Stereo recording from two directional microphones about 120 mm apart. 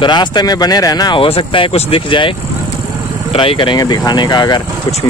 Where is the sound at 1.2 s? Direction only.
45° left (ahead or behind).